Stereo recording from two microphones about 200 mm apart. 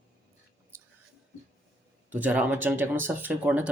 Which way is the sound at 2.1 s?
10° right (ahead or behind).